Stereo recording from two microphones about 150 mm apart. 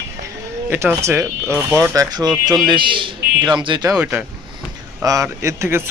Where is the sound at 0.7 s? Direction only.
15° right (ahead or behind); by 3.9 s 30° right (ahead or behind).